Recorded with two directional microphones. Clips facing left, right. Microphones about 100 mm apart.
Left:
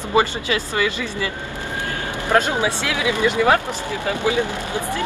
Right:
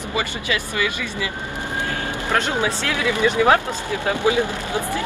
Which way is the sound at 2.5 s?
15° left (ahead or behind).